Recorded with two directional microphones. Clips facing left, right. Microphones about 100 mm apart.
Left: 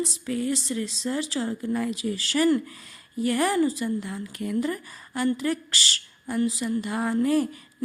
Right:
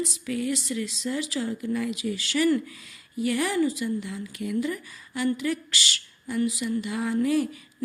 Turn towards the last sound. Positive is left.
turn(degrees=40)  # may be behind; listen again after turning